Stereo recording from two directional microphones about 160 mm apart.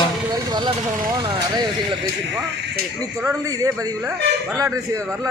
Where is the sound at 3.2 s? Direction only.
20° right (ahead or behind).